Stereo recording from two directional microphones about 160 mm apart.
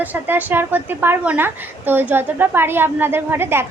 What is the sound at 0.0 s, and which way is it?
A woman's voice, 10° right (ahead or behind).